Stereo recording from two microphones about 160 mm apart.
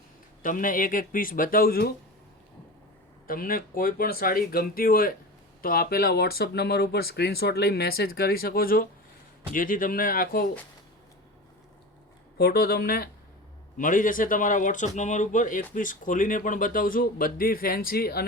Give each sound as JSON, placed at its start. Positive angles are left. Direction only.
{"t": 0.4, "sound": "speech", "side_deg": 60}
{"t": 3.2, "sound": "speech", "side_deg": 65}
{"t": 12.4, "sound": "speech", "side_deg": 80}
{"t": 13.7, "sound": "speech", "side_deg": 55}